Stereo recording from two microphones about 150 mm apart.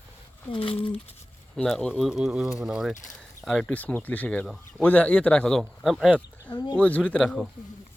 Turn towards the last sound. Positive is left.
turn(degrees=5)  # may be behind; listen again after turning